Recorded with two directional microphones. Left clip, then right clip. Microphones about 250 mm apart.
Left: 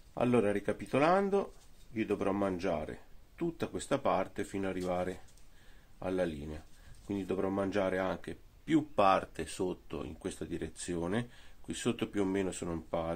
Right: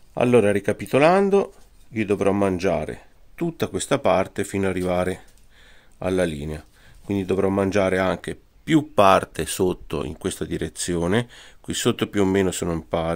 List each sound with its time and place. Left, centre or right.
0.1 s speech: right